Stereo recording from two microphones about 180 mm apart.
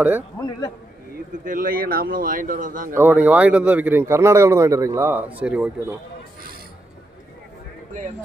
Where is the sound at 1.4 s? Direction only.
50° right (ahead or behind).